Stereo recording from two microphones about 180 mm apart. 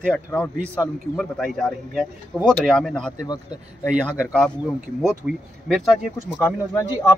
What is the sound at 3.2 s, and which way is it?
Speech, 20° left (ahead or behind).